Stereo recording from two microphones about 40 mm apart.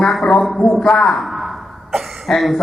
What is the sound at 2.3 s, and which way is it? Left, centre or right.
Speech, centre.